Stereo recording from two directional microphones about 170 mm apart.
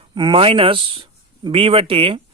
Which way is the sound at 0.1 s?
30° right (ahead or behind).